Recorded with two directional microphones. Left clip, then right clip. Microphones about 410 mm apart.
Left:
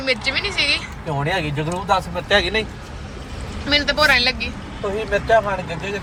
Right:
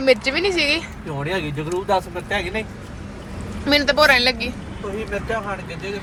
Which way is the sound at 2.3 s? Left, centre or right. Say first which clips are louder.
Left 9 dB; centre.